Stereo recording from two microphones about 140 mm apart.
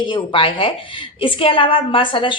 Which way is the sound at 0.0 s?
35° left (ahead or behind).